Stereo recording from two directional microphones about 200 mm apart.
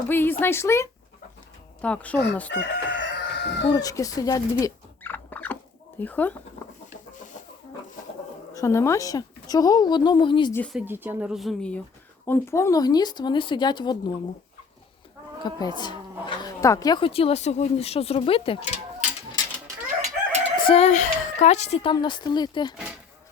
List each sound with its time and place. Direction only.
0.1 s speech: 10° left (ahead or behind)
2.5 s chicken: 65° left (ahead or behind)
3.7 s rodents: 20° left (ahead or behind)
6.0 s speech: 10° left (ahead or behind)
8.5 s speech: 15° left (ahead or behind)
10.5 s speech: 5° left (ahead or behind)
10.8 s speech: 10° right (ahead or behind); by 14.1 s 20° left (ahead or behind)
15.4 s speech: 20° left (ahead or behind)
20.6 s speech: 30° left (ahead or behind)
21.9 s speech: 20° left (ahead or behind)